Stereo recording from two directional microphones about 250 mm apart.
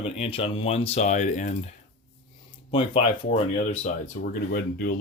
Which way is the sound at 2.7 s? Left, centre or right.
Left.